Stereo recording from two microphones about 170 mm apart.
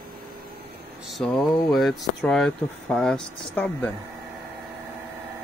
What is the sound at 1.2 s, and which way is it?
Speech, 5° left (ahead or behind).